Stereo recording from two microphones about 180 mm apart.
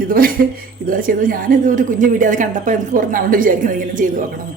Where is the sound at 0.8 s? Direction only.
50° right (ahead or behind).